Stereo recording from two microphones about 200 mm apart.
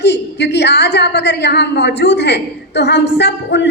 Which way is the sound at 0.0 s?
60° left (ahead or behind).